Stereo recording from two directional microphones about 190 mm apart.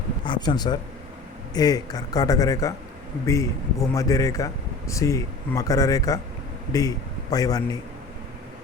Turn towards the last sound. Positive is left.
turn(degrees=20)  # may be behind; listen again after turning